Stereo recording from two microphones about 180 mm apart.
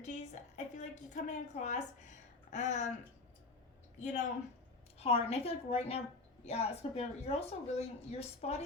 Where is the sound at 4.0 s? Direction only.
40° left (ahead or behind).